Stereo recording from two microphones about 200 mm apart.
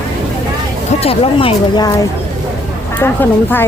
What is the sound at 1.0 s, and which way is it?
Speech, 30° left (ahead or behind).